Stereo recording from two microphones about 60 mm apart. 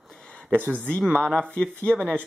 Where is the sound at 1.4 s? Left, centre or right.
Centre.